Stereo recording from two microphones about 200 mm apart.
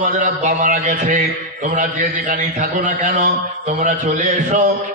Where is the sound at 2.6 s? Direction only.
40° right (ahead or behind).